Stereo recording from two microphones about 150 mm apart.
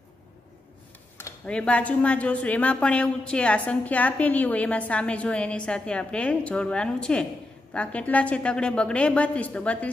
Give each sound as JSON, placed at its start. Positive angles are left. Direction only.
{"t": 1.4, "sound": "a woman's voice", "side_deg": 5}